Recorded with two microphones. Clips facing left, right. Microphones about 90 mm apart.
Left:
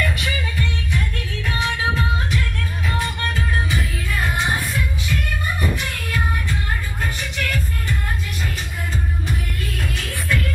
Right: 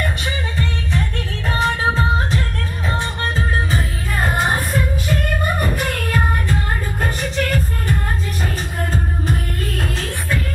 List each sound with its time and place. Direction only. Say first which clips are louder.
0.0 s music: even; 30° right (ahead or behind)